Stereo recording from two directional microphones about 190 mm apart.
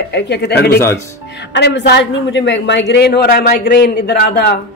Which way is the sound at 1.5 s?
70° left (ahead or behind).